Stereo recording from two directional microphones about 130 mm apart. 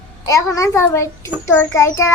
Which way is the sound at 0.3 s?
25° left (ahead or behind).